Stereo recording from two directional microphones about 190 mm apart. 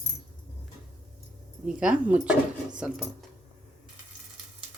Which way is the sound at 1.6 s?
5° right (ahead or behind).